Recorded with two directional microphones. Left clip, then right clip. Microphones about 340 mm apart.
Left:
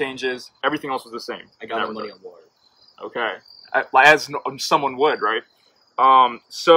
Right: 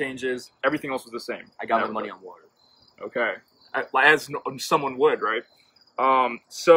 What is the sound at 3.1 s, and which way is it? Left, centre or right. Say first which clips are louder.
Speech: left 1 dB; centre.